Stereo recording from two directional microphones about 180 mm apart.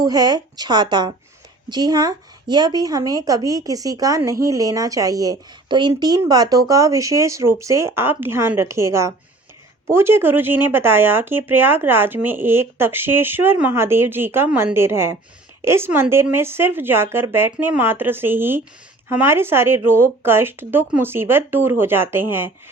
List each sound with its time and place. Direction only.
0.0 s a woman's voice: 20° right (ahead or behind)